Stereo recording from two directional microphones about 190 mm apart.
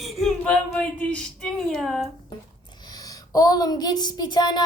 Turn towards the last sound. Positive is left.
turn(degrees=25)  # may be behind; listen again after turning